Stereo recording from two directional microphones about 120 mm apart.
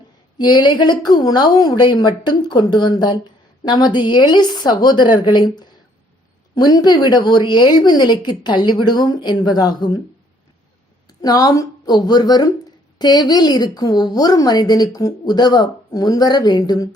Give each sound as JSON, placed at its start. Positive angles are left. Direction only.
{"t": 0.3, "sound": "a woman's voice", "side_deg": 35}
{"t": 11.2, "sound": "a woman's voice", "side_deg": 30}